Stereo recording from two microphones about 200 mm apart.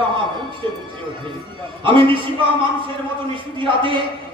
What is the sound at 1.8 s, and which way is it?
A man's voice, 25° right (ahead or behind).